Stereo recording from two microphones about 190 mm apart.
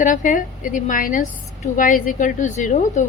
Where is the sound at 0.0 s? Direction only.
45° left (ahead or behind).